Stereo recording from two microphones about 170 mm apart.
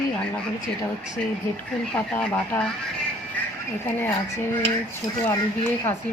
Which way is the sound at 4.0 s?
15° left (ahead or behind).